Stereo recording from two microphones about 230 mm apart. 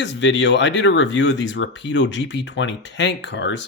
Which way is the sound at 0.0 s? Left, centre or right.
Left.